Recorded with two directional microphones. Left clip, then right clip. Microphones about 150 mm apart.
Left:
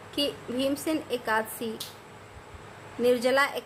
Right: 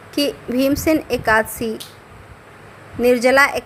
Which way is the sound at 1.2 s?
40° right (ahead or behind).